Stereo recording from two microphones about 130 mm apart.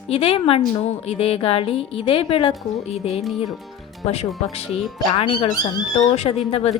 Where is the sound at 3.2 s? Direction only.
Centre (ahead or behind).